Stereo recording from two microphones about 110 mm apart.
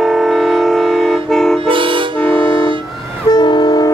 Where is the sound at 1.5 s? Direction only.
50° right (ahead or behind).